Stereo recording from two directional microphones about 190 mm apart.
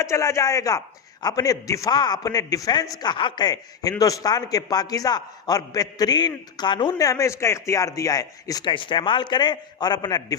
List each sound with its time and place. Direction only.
0.0 s a man's voice: 15° left (ahead or behind)